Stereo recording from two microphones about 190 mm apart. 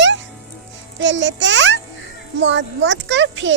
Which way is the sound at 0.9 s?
75° right (ahead or behind).